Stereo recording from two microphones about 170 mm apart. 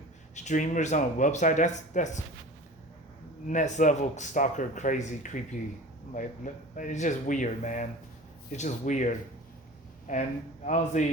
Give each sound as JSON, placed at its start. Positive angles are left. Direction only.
{"t": 0.3, "sound": "speech", "side_deg": 45}
{"t": 3.4, "sound": "speech", "side_deg": 45}